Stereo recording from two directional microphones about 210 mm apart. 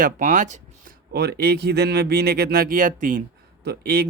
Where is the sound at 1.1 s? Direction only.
50° right (ahead or behind).